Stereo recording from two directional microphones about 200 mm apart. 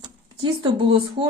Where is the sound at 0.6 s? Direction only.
25° right (ahead or behind).